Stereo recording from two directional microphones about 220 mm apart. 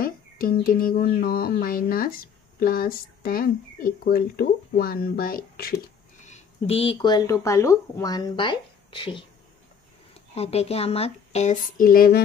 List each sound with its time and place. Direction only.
0.0 s a sound: 40° left (ahead or behind)
6.2 s speech: 30° left (ahead or behind)
10.3 s speech: 30° left (ahead or behind)